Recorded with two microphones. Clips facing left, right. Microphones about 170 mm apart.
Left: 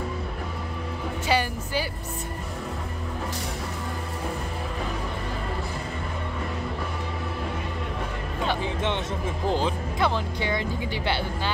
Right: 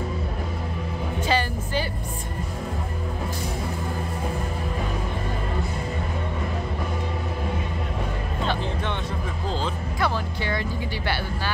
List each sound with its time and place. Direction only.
1.2 s music: 10° left (ahead or behind)
9.5 s music: 15° left (ahead or behind)